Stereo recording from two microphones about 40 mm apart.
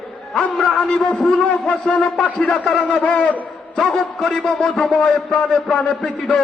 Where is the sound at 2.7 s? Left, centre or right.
Left.